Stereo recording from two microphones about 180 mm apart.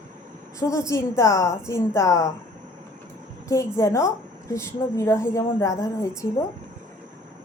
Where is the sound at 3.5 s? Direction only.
15° left (ahead or behind).